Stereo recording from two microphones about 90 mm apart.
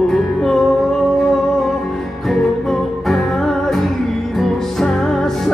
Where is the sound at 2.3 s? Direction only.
5° left (ahead or behind).